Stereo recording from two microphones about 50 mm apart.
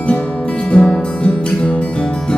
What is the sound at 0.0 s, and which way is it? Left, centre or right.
Music, left.